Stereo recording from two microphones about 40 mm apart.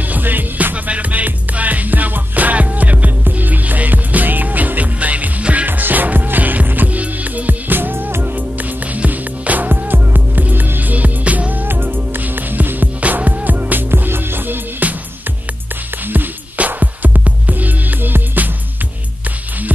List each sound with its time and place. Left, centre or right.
0.1 s music: right
0.8 s music: right
5.7 s music: right
8.4 s music: right
11.6 s music: right
13.8 s music: right
14.8 s music: right
16.5 s music: right